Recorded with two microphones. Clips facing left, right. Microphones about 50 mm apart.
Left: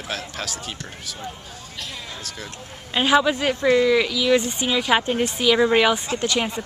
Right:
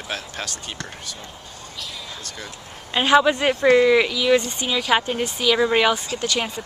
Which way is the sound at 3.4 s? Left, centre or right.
Centre.